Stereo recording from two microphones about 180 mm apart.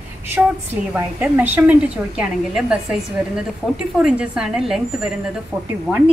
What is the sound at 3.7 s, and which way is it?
A woman's voice, 5° right (ahead or behind).